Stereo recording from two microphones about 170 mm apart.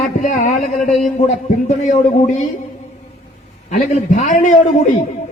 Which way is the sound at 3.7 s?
45° left (ahead or behind).